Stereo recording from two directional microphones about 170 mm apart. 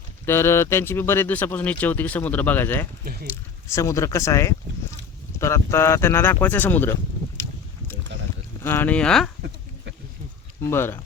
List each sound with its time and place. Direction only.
0.3 s a man's voice: 15° left (ahead or behind)
3.0 s speech: 60° right (ahead or behind)
3.2 s a man's voice: 15° left (ahead or behind)
8.6 s a man's voice: 10° left (ahead or behind)
10.6 s a man's voice: 15° left (ahead or behind)